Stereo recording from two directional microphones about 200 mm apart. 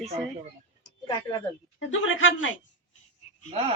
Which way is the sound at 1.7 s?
75° left (ahead or behind).